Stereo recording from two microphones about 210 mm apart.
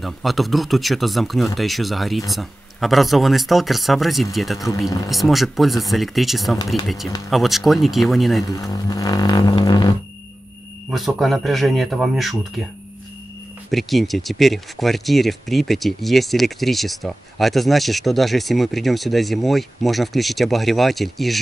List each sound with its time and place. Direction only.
0.0 s speech: centre (ahead or behind)
4.6 s speech: 15° left (ahead or behind)
5.1 s speech: centre (ahead or behind)
8.5 s speech: 15° left (ahead or behind)
10.9 s speech: centre (ahead or behind)
13.7 s speech: centre (ahead or behind)